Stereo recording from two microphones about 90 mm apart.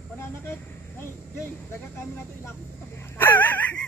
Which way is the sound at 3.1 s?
25° left (ahead or behind).